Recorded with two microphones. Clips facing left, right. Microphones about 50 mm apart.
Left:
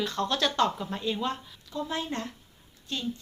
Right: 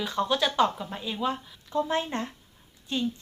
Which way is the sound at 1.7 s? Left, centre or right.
Right.